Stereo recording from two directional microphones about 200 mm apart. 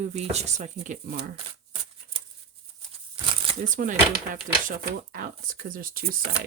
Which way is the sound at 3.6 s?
40° right (ahead or behind).